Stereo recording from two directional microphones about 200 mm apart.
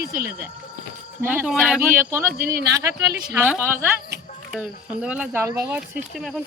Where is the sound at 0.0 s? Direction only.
45° right (ahead or behind).